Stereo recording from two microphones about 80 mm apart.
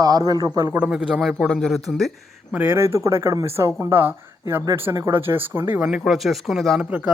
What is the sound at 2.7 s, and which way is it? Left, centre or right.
Speech, right.